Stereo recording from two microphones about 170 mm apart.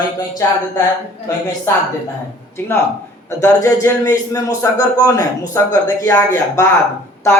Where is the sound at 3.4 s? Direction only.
20° left (ahead or behind).